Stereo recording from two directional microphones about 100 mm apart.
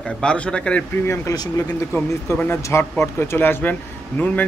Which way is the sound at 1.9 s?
20° left (ahead or behind).